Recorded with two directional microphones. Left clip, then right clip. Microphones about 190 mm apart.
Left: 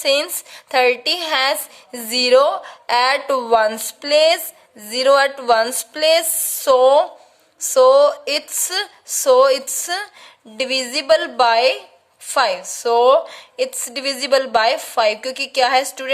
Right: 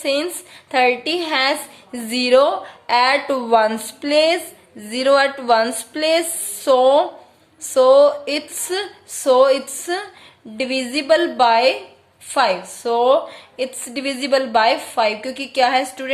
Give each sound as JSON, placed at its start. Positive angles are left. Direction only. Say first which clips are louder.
{"t": 0.0, "sound": "a woman's voice", "louder": "left 3 dB", "side_deg": 50}